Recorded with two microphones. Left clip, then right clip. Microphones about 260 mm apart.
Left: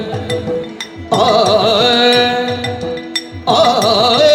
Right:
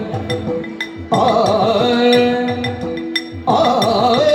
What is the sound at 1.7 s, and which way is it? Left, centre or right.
Music, left.